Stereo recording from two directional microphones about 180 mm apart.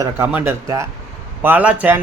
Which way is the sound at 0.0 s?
15° right (ahead or behind).